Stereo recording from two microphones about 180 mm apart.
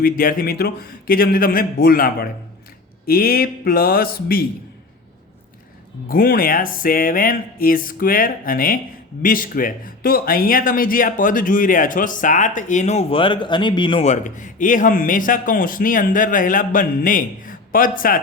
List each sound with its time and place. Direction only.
0.0 s speech: 50° left (ahead or behind)
6.1 s speech: 55° left (ahead or behind)